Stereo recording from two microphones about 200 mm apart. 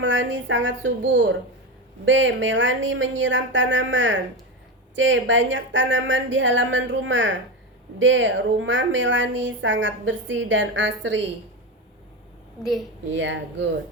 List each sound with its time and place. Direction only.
0.0 s a woman's voice: 65° right (ahead or behind)
13.1 s speech: 65° right (ahead or behind)